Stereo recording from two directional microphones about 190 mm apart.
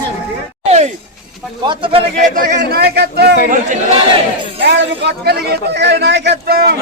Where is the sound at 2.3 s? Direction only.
55° right (ahead or behind).